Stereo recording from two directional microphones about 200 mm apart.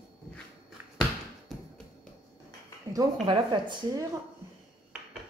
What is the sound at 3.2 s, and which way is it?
Speech, 25° right (ahead or behind).